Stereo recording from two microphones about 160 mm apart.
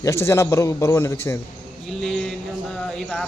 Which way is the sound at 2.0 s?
Centre (ahead or behind).